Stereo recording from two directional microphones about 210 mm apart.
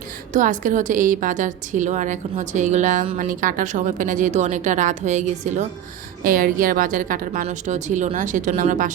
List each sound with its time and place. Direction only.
0.3 s a woman's voice: 40° right (ahead or behind)